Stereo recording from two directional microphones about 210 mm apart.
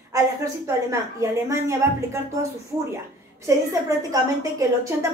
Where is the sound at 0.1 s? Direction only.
15° right (ahead or behind).